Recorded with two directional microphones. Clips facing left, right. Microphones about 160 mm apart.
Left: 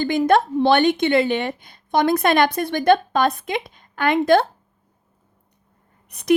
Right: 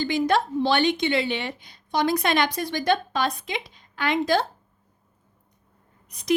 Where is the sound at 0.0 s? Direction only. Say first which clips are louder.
Left 5 dB; 50° left (ahead or behind).